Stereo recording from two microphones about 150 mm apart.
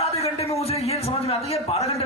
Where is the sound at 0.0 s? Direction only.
45° left (ahead or behind).